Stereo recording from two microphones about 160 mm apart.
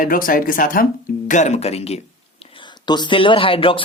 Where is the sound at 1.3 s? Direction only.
45° left (ahead or behind).